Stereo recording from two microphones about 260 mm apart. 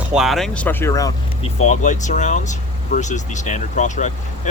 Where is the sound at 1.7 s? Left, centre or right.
Left.